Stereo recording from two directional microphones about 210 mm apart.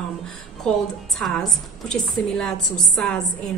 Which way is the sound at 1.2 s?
Centre (ahead or behind).